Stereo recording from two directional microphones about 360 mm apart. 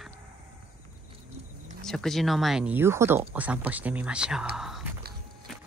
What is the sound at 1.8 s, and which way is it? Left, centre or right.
Speech, centre.